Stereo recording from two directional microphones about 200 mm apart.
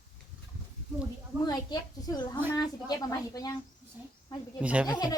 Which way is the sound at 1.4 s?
20° left (ahead or behind).